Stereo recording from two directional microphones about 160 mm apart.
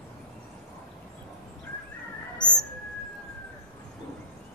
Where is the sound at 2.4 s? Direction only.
25° left (ahead or behind).